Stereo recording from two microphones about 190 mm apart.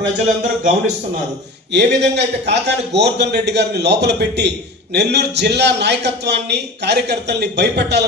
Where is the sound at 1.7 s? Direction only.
65° right (ahead or behind).